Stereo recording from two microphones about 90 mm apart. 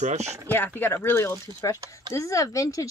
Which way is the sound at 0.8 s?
25° left (ahead or behind).